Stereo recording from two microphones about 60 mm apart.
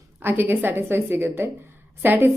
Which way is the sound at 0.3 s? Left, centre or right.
Right.